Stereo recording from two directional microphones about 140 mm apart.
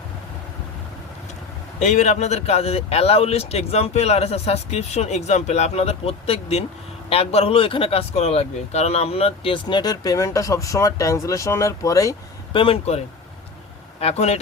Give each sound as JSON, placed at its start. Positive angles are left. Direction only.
{"t": 1.8, "sound": "speech", "side_deg": 60}
{"t": 12.5, "sound": "speech", "side_deg": 40}
{"t": 14.0, "sound": "speech", "side_deg": 50}